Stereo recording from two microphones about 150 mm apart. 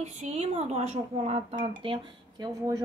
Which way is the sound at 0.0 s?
45° right (ahead or behind).